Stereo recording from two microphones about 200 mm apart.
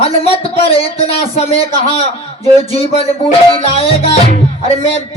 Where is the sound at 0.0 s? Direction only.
30° left (ahead or behind).